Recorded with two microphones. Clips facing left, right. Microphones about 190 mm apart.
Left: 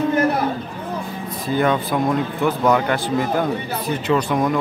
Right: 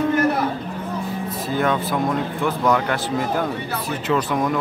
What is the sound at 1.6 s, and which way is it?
Speech, centre (ahead or behind).